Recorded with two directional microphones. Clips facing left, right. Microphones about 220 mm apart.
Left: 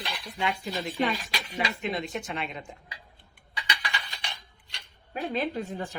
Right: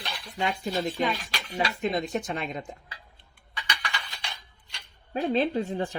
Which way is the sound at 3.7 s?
15° left (ahead or behind).